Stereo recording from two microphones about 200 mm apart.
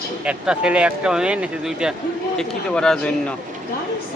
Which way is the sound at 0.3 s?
5° right (ahead or behind).